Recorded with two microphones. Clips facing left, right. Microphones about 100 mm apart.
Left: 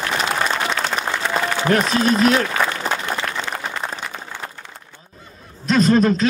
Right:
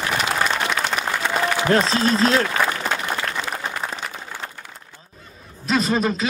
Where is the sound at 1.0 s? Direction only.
35° left (ahead or behind).